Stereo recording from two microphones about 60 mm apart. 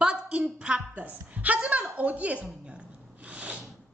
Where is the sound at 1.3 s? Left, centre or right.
Right.